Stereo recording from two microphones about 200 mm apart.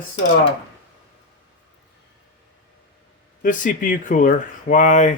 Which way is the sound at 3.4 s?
40° left (ahead or behind).